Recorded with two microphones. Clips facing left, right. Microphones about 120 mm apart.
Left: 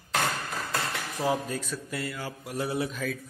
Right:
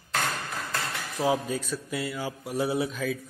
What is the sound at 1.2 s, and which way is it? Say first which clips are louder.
A man's voice: right 3 dB; 5° right (ahead or behind).